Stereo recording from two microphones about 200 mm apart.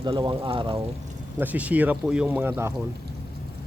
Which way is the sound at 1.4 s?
10° right (ahead or behind).